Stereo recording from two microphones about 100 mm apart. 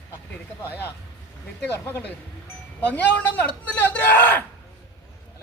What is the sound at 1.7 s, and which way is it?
A man's voice, 20° left (ahead or behind).